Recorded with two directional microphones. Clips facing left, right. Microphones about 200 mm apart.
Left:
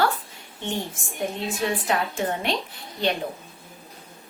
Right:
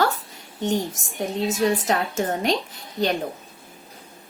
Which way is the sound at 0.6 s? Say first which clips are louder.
Right 6 dB; 40° right (ahead or behind).